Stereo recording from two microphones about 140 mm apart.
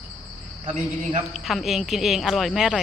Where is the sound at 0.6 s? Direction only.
60° right (ahead or behind).